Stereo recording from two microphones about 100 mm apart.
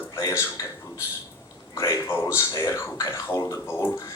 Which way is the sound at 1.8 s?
30° left (ahead or behind).